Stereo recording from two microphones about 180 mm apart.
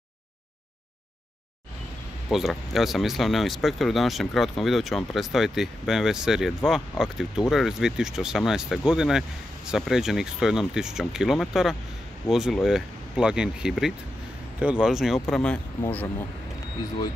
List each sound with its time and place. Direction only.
2.3 s speech: centre (ahead or behind)